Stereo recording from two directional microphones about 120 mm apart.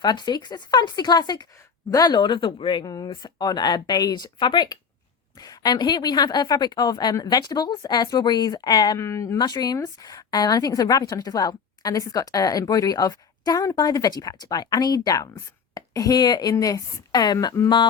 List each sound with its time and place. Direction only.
0.0 s speech: 35° left (ahead or behind)